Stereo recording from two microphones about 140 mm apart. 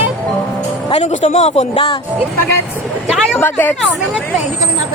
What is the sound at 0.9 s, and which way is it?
A man's voice, 45° left (ahead or behind).